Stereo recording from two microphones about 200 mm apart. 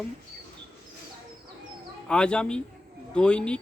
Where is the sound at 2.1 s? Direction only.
5° left (ahead or behind).